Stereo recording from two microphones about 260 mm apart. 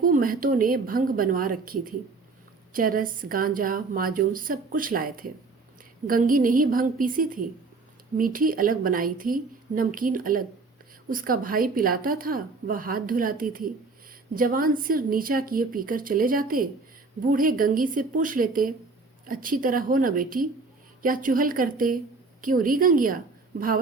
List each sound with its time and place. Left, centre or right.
0.0 s a woman's voice: right